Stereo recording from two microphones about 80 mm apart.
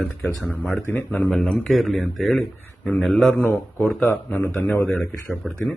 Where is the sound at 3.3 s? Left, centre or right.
Left.